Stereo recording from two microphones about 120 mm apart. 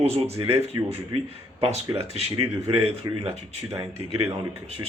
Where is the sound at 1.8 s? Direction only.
25° right (ahead or behind).